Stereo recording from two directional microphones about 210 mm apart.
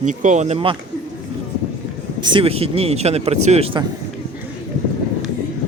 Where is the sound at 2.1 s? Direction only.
20° right (ahead or behind).